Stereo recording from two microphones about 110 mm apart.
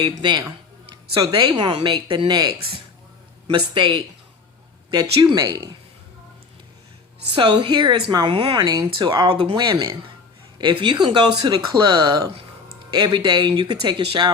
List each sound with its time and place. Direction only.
0.0 s speech: 40° right (ahead or behind)
7.3 s speech: 50° right (ahead or behind); by 12.3 s 35° right (ahead or behind)
12.9 s speech: 45° right (ahead or behind)